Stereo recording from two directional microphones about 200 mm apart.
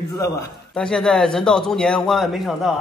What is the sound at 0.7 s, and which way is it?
A man's voice, 5° left (ahead or behind).